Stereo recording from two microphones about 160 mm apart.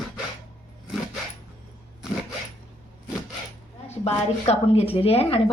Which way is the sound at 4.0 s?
40° left (ahead or behind).